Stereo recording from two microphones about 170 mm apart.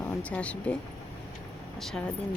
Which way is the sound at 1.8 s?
Centre (ahead or behind).